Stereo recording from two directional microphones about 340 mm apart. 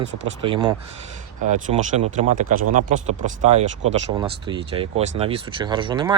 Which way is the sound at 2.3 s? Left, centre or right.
Right.